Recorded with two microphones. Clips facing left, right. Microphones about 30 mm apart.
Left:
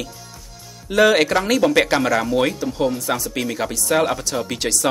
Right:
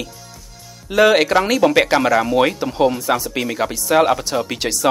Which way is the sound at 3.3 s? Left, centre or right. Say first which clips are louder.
Right 2 dB; centre.